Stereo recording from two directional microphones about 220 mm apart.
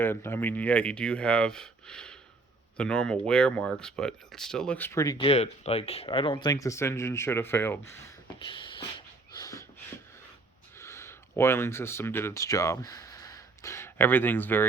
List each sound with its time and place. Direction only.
0.0 s speech: 10° left (ahead or behind)
8.4 s a sound: 20° left (ahead or behind)
10.8 s speech: 10° left (ahead or behind)